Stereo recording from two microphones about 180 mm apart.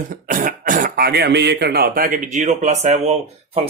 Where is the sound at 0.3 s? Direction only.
50° right (ahead or behind).